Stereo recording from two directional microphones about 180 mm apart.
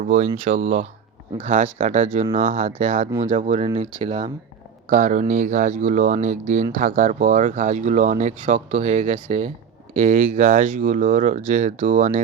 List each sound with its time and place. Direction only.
0.0 s speech: 45° right (ahead or behind)
3.9 s speech: 30° right (ahead or behind)
4.9 s speech: 40° right (ahead or behind)